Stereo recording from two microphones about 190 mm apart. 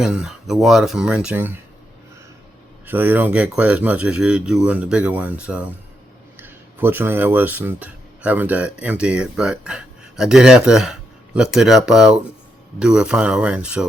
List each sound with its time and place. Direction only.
0.0 s speech: 5° right (ahead or behind)
2.8 s speech: 10° right (ahead or behind)